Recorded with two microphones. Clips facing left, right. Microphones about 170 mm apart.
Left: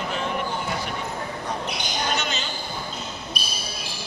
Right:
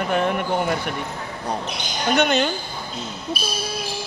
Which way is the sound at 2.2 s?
60° right (ahead or behind).